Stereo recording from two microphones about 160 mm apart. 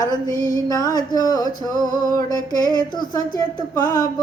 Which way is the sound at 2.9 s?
25° left (ahead or behind).